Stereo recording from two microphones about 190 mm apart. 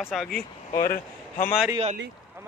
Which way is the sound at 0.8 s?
50° left (ahead or behind).